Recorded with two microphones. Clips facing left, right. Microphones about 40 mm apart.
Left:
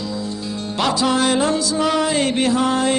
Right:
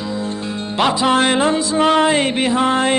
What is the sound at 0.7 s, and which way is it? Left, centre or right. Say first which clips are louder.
Music: right 3 dB; right.